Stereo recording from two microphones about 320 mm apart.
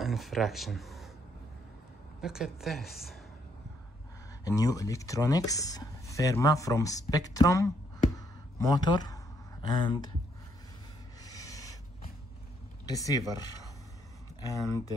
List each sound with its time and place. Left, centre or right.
0.0 s speech: centre
2.2 s a woman's voice: centre
4.5 s speech: centre
11.2 s rub: centre
12.8 s speech: centre
14.6 s speech: centre